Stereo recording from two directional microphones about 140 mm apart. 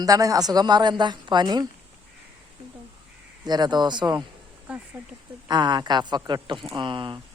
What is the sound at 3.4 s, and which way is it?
Speech, 30° right (ahead or behind).